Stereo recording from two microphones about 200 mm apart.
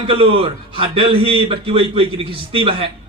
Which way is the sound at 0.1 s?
30° right (ahead or behind).